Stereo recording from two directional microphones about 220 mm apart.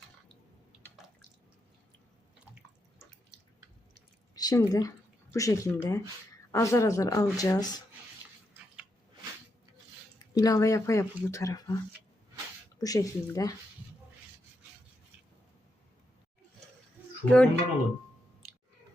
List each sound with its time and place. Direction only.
4.4 s speech: 15° left (ahead or behind)
10.3 s speech: 15° left (ahead or behind)
12.8 s speech: 15° left (ahead or behind)
17.2 s speech: 5° left (ahead or behind)